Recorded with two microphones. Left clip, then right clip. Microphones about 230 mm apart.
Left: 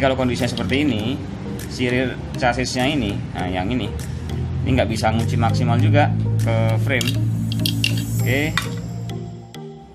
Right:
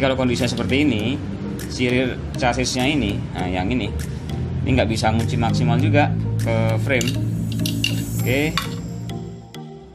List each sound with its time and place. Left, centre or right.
0.0 s speech: centre
8.2 s stir: centre